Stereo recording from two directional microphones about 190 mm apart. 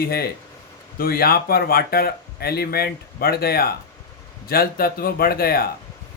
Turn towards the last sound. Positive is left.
turn(degrees=50)  # may be behind; listen again after turning